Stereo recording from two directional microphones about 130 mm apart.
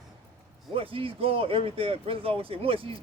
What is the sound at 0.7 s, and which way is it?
Speech, 45° right (ahead or behind).